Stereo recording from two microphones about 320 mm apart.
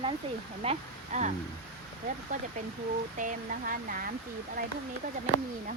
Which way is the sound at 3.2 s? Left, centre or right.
Right.